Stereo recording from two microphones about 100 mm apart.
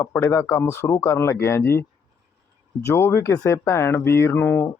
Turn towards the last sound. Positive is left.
turn(degrees=20)  # may be behind; listen again after turning